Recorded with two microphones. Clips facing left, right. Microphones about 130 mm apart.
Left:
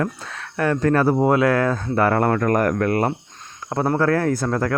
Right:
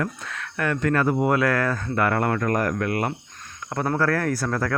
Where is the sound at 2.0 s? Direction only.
35° left (ahead or behind).